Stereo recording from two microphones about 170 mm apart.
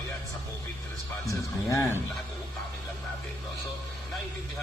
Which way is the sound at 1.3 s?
15° left (ahead or behind).